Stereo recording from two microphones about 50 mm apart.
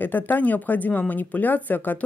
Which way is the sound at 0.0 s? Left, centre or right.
Left.